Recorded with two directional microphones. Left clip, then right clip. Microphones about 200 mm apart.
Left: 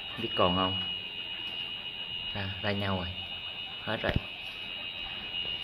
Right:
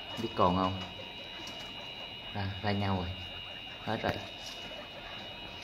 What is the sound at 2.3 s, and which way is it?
Speech, 5° left (ahead or behind).